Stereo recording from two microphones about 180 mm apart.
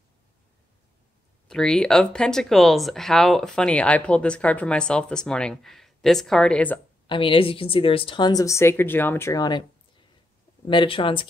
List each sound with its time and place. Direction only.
1.5 s speech: 5° left (ahead or behind)
7.1 s a woman's voice: 30° left (ahead or behind)
10.7 s a woman's voice: 25° left (ahead or behind)